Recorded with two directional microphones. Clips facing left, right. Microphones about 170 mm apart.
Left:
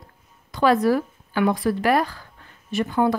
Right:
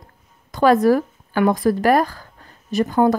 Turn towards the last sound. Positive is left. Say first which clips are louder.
# right 4 dB
turn(degrees=-40)  # may be behind; listen again after turning